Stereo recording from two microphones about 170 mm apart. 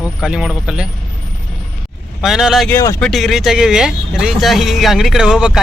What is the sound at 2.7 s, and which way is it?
Speech, 15° left (ahead or behind).